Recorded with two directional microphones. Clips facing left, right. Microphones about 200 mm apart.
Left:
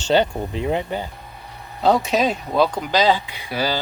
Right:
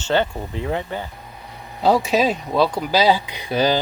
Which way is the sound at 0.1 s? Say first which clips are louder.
Left 2 dB; 15° left (ahead or behind).